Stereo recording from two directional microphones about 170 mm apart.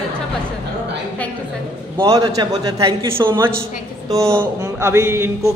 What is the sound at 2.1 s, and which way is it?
A man's voice, 25° right (ahead or behind).